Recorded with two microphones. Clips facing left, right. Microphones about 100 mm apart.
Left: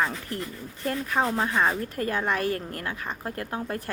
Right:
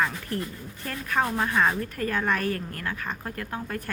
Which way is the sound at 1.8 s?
30° left (ahead or behind).